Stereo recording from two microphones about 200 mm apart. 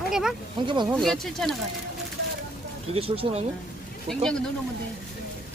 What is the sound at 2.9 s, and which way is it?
Speech, 30° right (ahead or behind).